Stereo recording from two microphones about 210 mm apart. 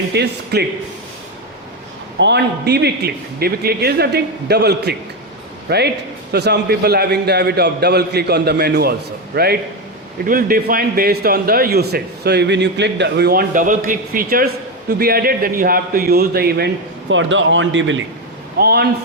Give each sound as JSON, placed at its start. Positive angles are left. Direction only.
{"t": 0.1, "sound": "a man's voice", "side_deg": -50}
{"t": 2.1, "sound": "a man's voice", "side_deg": -55}
{"t": 17.1, "sound": "speech", "side_deg": -65}
{"t": 18.6, "sound": "a man's voice", "side_deg": -50}